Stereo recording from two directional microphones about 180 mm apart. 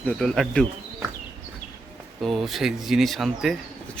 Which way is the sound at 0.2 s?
Centre (ahead or behind).